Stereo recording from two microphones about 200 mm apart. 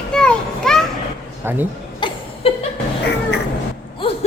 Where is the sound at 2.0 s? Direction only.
25° left (ahead or behind).